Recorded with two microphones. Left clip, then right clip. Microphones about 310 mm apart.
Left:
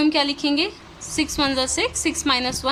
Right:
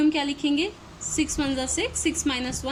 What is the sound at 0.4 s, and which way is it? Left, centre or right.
Speech, left.